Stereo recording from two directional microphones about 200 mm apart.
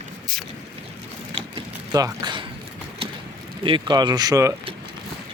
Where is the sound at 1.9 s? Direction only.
20° right (ahead or behind).